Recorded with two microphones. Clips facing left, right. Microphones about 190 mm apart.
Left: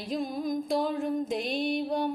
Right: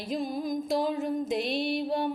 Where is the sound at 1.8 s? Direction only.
5° right (ahead or behind).